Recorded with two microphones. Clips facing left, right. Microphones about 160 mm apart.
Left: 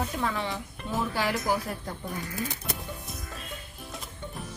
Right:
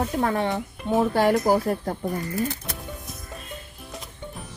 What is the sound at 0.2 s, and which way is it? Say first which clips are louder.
A woman's voice: right 7 dB; 55° right (ahead or behind).